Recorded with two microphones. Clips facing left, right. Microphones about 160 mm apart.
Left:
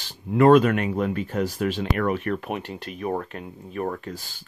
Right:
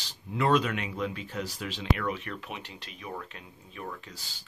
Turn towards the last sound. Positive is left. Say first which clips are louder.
# left 11 dB
turn(degrees=50)  # may be behind; listen again after turning